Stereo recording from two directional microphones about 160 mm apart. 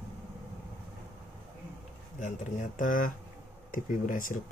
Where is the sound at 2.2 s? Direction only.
50° left (ahead or behind).